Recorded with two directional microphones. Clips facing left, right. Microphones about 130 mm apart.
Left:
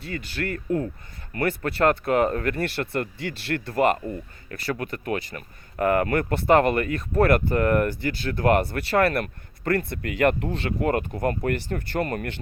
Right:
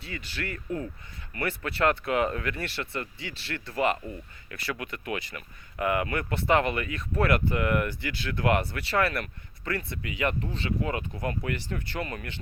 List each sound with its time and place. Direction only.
0.0 s speech: 45° left (ahead or behind)